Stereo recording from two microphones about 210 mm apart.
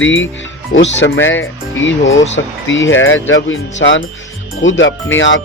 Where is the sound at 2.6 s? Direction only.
65° left (ahead or behind).